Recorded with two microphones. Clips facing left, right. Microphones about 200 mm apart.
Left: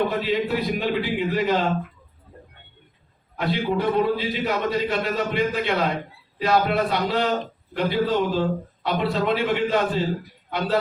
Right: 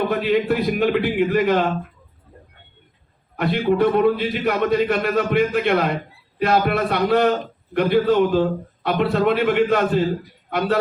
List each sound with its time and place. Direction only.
0.1 s a man's voice: 60° right (ahead or behind)
3.3 s a man's voice: 60° right (ahead or behind)